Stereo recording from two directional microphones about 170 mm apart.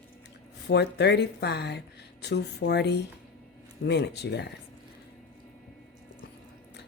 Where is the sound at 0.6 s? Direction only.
80° left.